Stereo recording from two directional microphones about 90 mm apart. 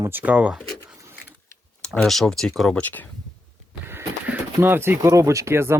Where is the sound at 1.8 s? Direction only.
5° left (ahead or behind).